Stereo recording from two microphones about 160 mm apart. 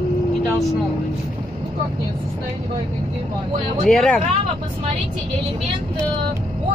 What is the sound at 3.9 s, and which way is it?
Speech, 5° left (ahead or behind).